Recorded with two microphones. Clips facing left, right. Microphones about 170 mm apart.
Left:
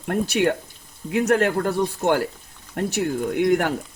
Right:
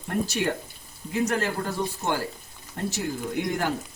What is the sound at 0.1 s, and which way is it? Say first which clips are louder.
Speech: left 6 dB; 65° left (ahead or behind).